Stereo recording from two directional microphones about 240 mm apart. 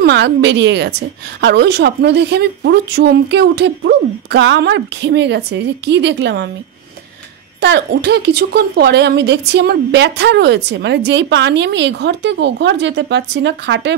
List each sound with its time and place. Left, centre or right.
0.0 s a woman's voice: right
7.6 s a woman's voice: right